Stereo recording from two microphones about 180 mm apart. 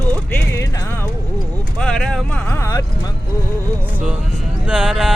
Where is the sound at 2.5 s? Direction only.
15° left (ahead or behind).